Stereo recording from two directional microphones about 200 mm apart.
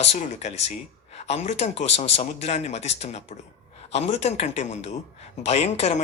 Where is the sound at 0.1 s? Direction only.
35° left (ahead or behind).